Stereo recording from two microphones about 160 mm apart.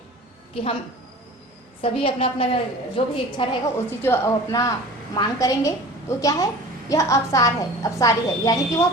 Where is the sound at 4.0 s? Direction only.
15° left (ahead or behind).